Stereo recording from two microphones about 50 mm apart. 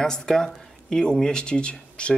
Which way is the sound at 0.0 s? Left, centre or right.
Centre.